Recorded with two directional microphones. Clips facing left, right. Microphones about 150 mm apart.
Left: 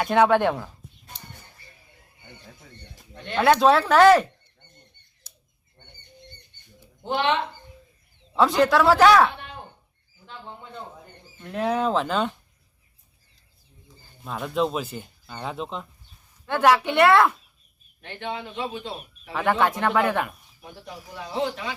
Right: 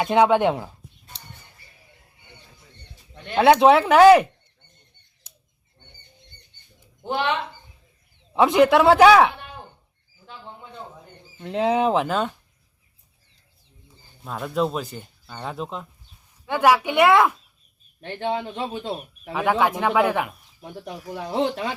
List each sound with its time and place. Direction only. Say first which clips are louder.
0.0 s speech: right 1 dB; 15° right (ahead or behind)
3.3 s speech: right 3 dB; 20° right (ahead or behind)
8.4 s speech: right 3 dB; 20° right (ahead or behind)
11.3 s speech: right 4 dB; 25° right (ahead or behind)
14.3 s speech: right 1 dB; centre (ahead or behind)
18.2 s speech: right 4 dB; 35° right (ahead or behind)
19.3 s speech: right 1 dB; 10° right (ahead or behind)
21.2 s speech: right 4 dB; 50° right (ahead or behind)